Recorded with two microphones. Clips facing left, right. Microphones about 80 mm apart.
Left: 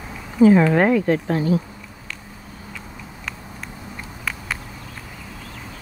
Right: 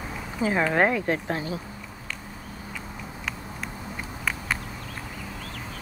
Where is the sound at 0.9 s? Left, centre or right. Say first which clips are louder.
Left 7 dB; right.